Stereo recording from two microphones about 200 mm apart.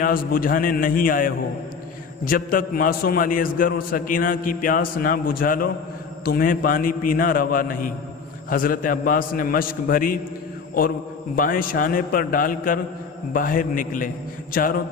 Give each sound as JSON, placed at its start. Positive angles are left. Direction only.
{"t": 0.0, "sound": "a man's voice", "side_deg": 45}
{"t": 11.3, "sound": "a man's voice", "side_deg": 45}